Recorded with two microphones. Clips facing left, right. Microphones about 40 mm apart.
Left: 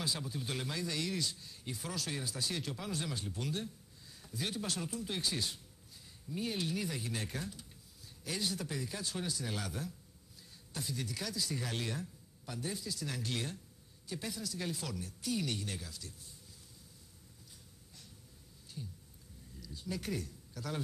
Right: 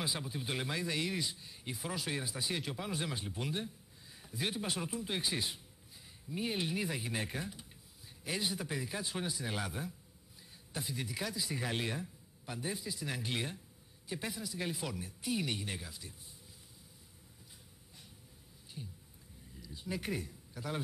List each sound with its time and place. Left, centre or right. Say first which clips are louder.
0.0 s a man's voice: even; right
18.8 s speech: left 1 dB; centre